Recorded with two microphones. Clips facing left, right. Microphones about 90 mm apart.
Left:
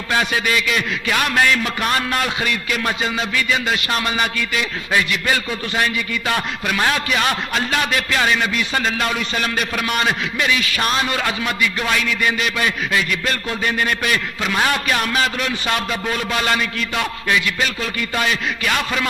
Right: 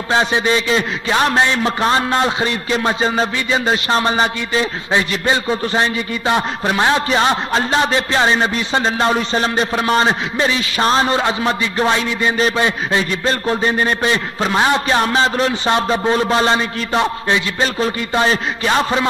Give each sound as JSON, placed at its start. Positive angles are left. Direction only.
{"t": 0.1, "sound": "a man's voice", "side_deg": -25}